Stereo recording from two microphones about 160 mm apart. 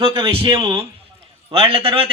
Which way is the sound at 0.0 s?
35° right (ahead or behind).